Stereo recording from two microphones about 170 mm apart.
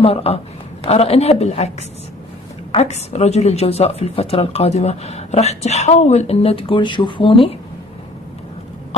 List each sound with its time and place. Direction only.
0.0 s a woman's voice: 35° left (ahead or behind)
2.7 s a woman's voice: 35° left (ahead or behind)